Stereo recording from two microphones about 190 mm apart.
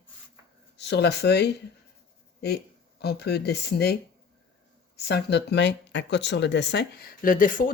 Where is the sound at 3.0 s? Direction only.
60° left (ahead or behind).